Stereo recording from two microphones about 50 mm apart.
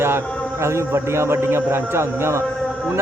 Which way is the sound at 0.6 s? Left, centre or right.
Right.